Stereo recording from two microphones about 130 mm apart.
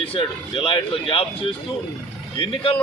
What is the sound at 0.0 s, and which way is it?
Speech, 45° left (ahead or behind).